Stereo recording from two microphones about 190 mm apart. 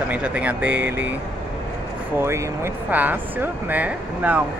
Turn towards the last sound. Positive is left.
turn(degrees=-5)  # may be behind; listen again after turning